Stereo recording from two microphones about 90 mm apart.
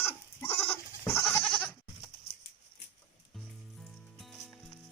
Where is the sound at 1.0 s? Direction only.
35° left (ahead or behind).